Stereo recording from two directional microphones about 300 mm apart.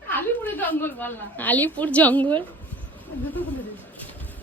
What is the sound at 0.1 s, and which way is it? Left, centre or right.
A woman's voice, centre.